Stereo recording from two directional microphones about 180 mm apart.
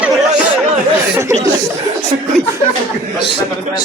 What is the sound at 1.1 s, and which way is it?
Speech, 15° right (ahead or behind).